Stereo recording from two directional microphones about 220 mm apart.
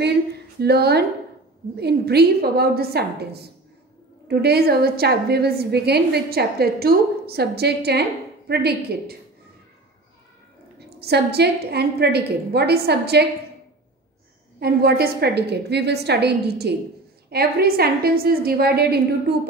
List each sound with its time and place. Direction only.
0.0 s a sound: 50° right (ahead or behind)
1.8 s a woman's voice: 45° right (ahead or behind)
10.8 s a woman's voice: 50° right (ahead or behind)
14.6 s a woman's voice: 45° right (ahead or behind)